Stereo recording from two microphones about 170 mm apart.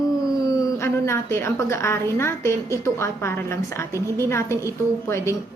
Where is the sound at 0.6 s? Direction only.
15° left (ahead or behind).